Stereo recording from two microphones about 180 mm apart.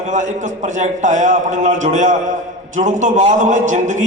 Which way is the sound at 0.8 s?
45° right (ahead or behind).